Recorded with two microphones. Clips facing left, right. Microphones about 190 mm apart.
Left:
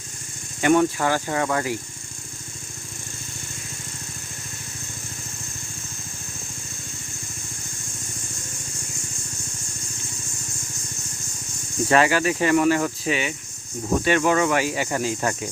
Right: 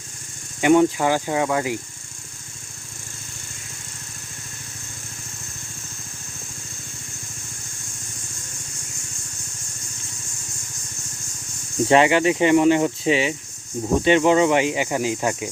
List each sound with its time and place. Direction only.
0.6 s speech: 15° right (ahead or behind)
11.9 s speech: 20° right (ahead or behind)